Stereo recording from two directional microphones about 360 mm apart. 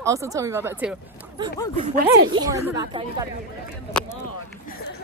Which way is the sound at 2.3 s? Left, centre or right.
Centre.